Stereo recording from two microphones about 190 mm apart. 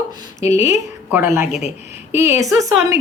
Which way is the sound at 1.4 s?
35° left (ahead or behind).